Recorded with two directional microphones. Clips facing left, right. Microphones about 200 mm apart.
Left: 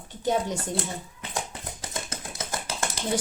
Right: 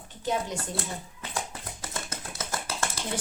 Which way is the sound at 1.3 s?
15° left (ahead or behind).